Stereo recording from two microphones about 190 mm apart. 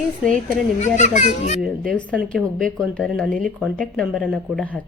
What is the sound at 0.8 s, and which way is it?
Speech, 40° left (ahead or behind).